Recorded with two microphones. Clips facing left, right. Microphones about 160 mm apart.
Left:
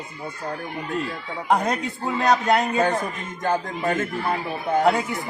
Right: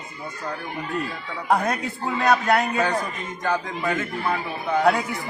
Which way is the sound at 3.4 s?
50° left (ahead or behind).